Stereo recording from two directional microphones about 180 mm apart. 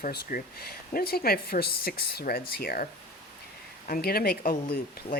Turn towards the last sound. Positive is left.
turn(degrees=55)  # may be behind; listen again after turning